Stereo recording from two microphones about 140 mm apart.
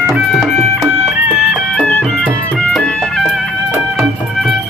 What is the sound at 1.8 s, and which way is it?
Music, 10° left (ahead or behind).